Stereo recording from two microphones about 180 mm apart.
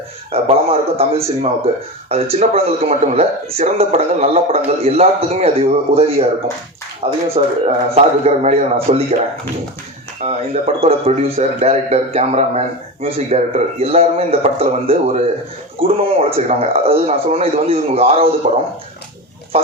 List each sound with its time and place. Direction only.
0.3 s speech: 35° right (ahead or behind)